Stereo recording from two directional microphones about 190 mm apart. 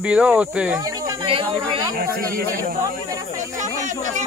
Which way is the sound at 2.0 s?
50° right (ahead or behind).